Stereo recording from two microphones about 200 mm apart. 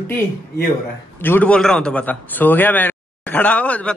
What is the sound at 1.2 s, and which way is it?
A man's voice, 10° left (ahead or behind).